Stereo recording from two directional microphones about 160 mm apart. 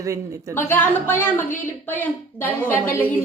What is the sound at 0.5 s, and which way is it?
A woman's voice, 15° left (ahead or behind).